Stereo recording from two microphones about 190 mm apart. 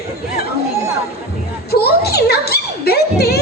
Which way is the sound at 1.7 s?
55° left (ahead or behind).